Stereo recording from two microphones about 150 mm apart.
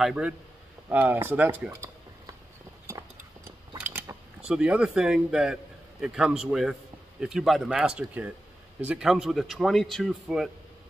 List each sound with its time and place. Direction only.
0.0 s a man's voice: 5° right (ahead or behind)
2.9 s a sound: 20° right (ahead or behind)
4.5 s a man's voice: 5° right (ahead or behind)